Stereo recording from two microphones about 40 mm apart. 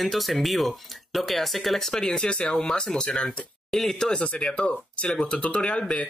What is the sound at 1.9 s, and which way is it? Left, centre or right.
Speech, centre.